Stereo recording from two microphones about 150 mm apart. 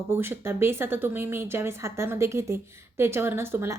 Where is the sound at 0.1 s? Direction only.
15° right (ahead or behind).